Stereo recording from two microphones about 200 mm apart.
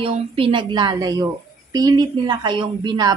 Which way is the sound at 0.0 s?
25° right (ahead or behind).